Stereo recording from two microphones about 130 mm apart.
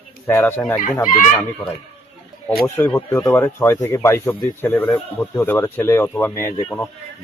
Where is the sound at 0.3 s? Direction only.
15° left (ahead or behind).